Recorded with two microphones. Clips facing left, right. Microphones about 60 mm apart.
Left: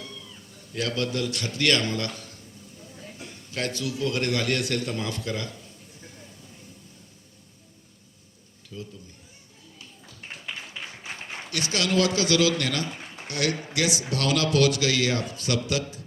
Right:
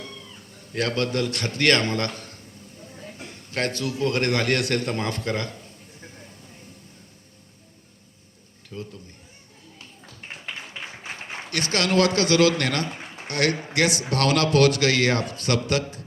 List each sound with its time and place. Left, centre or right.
0.0 s cat: right
8.7 s a man's voice: right
10.4 s a sound: right
11.5 s a man's voice: right
12.9 s a sound: right
13.2 s a man's voice: right